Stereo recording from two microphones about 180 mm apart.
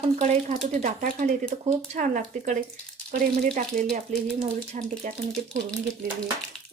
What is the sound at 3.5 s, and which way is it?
Speech, 45° right (ahead or behind).